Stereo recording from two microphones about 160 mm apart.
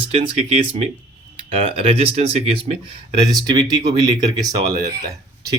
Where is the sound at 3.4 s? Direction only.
25° right (ahead or behind).